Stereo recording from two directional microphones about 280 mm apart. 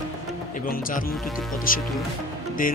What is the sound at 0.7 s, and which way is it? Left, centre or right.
Speech, left.